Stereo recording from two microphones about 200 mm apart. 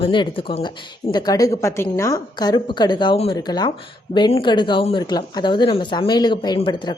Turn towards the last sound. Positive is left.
turn(degrees=20)  # may be behind; listen again after turning